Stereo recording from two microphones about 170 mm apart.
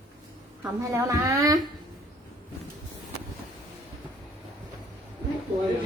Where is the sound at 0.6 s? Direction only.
15° right (ahead or behind).